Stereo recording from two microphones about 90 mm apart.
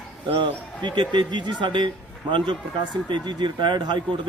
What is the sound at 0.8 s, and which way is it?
Speech, 60° right (ahead or behind).